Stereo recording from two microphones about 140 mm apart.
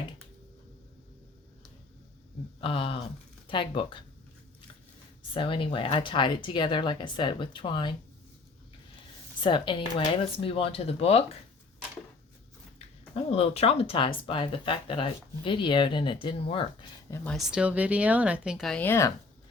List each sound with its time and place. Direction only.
2.6 s speech: 40° left (ahead or behind)
5.3 s speech: 35° left (ahead or behind)
9.4 s speech: 35° left (ahead or behind)
13.1 s speech: 45° left (ahead or behind)
17.1 s speech: 25° left (ahead or behind)
17.5 s speech: 10° right (ahead or behind)
18.7 s speech: 15° left (ahead or behind)